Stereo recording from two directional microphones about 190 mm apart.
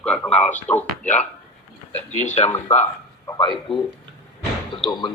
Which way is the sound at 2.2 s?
35° left (ahead or behind).